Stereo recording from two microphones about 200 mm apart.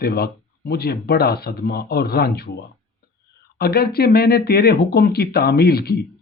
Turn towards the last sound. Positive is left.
turn(degrees=50)  # may be behind; listen again after turning